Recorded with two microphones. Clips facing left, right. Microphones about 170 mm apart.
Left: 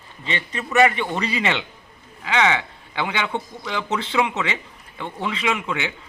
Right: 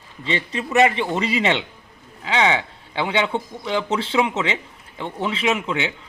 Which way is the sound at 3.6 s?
30° right (ahead or behind).